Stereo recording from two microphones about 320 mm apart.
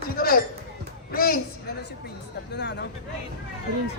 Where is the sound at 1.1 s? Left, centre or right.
Left.